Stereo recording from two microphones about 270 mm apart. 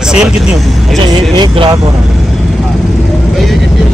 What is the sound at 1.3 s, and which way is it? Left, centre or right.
Speech, centre.